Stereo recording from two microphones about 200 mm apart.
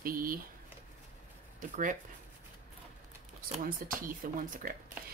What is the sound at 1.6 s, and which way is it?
Speech, 40° right (ahead or behind).